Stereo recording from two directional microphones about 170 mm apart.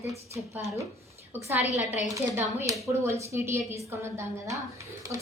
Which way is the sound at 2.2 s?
15° right (ahead or behind).